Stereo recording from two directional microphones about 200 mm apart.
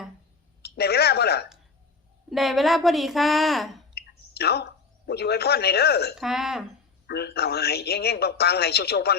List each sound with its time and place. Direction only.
0.6 s a sound: 55° left (ahead or behind)
2.3 s a woman's voice: centre (ahead or behind)
3.9 s speech: 55° left (ahead or behind)
6.1 s a woman's voice: centre (ahead or behind)
7.1 s speech: 55° left (ahead or behind)